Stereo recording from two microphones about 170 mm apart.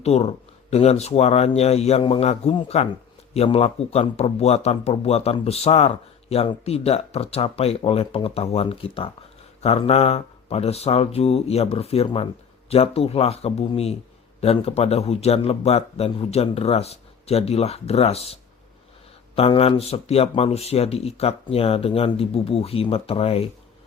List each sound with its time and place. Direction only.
0.0 s speech: 40° left (ahead or behind)
19.4 s speech: 35° left (ahead or behind)